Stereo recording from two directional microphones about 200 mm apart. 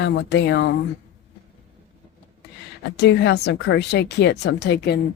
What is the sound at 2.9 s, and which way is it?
Speech, 60° left (ahead or behind).